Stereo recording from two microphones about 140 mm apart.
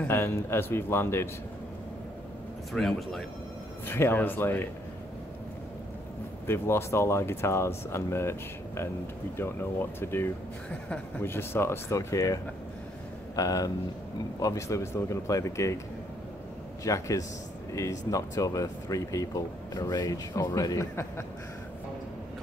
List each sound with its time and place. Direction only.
0.0 s speech: 15° left (ahead or behind)
2.7 s speech: 5° left (ahead or behind)
3.8 s speech: 15° left (ahead or behind)
6.4 s speech: 15° left (ahead or behind)
13.4 s speech: 25° left (ahead or behind)
16.8 s speech: 20° left (ahead or behind)